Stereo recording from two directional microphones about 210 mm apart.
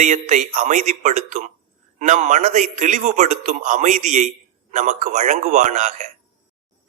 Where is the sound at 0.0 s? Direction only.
35° right (ahead or behind).